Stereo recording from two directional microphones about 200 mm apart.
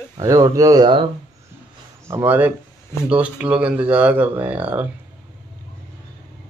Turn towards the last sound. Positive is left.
turn(degrees=-10)  # may be behind; listen again after turning